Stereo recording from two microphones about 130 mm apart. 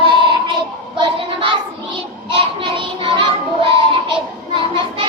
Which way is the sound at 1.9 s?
45° right (ahead or behind).